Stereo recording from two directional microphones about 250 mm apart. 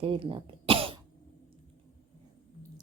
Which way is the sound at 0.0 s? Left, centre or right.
Right.